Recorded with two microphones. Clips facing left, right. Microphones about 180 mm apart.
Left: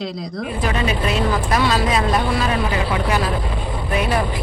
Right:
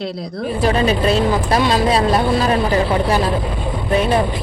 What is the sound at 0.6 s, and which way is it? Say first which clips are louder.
Speech: right 6 dB; 35° right (ahead or behind).